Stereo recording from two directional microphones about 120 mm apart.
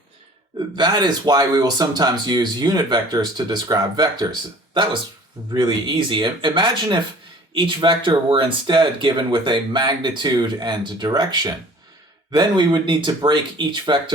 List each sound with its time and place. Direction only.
0.8 s speech: 35° right (ahead or behind)
5.5 s speech: 40° right (ahead or behind)